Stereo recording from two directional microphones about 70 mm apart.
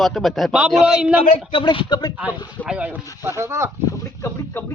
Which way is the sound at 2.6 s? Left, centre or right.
Centre.